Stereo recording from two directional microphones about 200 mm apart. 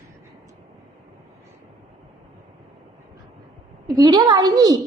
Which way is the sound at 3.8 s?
20° right (ahead or behind).